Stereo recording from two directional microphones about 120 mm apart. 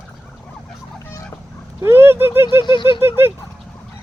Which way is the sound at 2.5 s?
40° left (ahead or behind).